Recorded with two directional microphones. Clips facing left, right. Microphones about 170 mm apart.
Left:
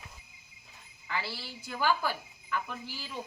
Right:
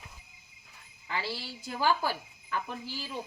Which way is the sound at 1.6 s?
35° right (ahead or behind).